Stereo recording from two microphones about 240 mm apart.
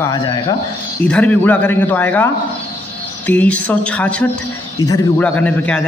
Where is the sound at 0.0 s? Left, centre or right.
Centre.